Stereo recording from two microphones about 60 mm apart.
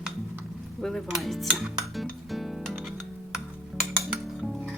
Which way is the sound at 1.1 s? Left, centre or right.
Centre.